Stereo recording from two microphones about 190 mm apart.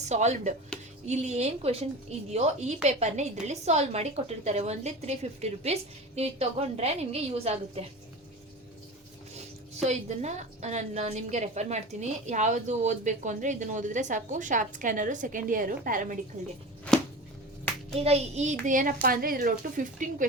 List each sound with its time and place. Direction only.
0.0 s a woman's voice: 35° right (ahead or behind)
9.8 s a woman's voice: 35° right (ahead or behind)
17.9 s a woman's voice: 35° right (ahead or behind)